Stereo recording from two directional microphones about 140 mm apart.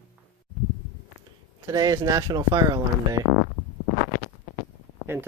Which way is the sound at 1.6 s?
25° right (ahead or behind).